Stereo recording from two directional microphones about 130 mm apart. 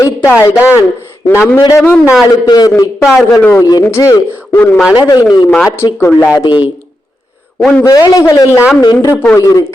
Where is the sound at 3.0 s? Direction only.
5° right (ahead or behind).